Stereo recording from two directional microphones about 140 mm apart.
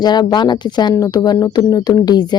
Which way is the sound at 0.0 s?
30° left (ahead or behind).